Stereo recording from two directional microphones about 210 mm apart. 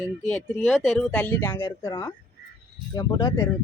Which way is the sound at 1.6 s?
20° left (ahead or behind).